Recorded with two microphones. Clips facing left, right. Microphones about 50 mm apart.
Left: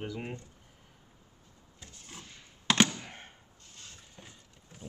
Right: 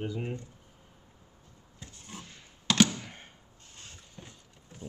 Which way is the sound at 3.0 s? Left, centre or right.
Centre.